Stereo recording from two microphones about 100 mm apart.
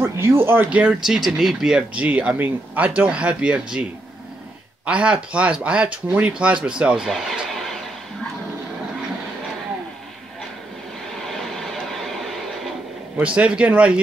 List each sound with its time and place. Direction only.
0.0 s speech: 25° right (ahead or behind); by 3.8 s 10° right (ahead or behind)
4.8 s speech: 10° right (ahead or behind)
7.1 s a sound: centre (ahead or behind)
11.2 s vehicle: 5° left (ahead or behind)
13.2 s speech: 10° right (ahead or behind)